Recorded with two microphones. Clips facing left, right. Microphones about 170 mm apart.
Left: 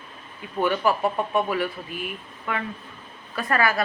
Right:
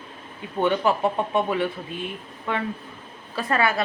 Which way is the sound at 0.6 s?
20° right (ahead or behind).